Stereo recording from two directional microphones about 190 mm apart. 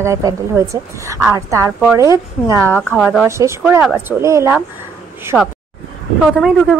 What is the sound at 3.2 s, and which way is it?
Speech, 15° right (ahead or behind).